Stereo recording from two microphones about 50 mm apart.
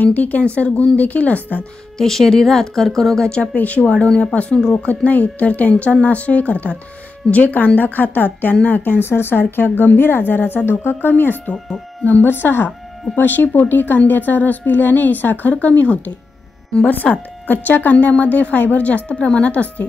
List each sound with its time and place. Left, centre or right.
0.0 s speech: left
2.0 s speech: centre
3.5 s speech: left
4.8 s a woman's voice: left
16.9 s a woman's voice: left